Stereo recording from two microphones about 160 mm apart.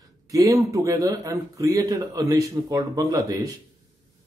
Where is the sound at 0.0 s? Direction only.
20° right (ahead or behind).